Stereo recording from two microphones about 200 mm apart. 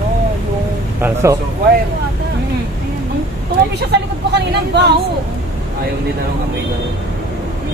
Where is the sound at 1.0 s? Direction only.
15° right (ahead or behind).